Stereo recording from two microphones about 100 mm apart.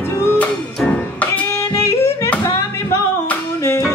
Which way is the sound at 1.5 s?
30° left (ahead or behind).